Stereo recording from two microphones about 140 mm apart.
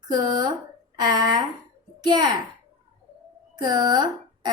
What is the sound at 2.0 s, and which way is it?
Speech, 30° right (ahead or behind).